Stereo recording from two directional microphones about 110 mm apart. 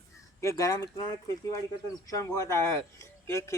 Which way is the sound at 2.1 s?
30° left (ahead or behind).